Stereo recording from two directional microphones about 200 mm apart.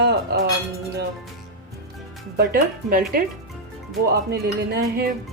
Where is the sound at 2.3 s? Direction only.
50° right (ahead or behind).